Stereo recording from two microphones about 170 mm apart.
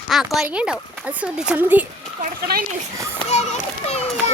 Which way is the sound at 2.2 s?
60° right (ahead or behind).